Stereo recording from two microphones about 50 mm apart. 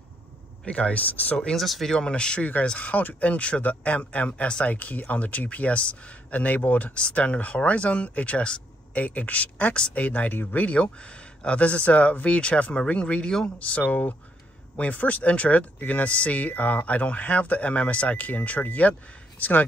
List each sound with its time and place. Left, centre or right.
0.7 s speech: left
1.1 s speech: left
1.6 s speech: centre
2.0 s speech: centre
2.9 s speech: left
9.8 s speech: centre
10.0 s speech: left
13.6 s speech: left